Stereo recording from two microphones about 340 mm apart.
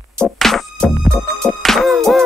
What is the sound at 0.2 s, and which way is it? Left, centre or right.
Music, centre.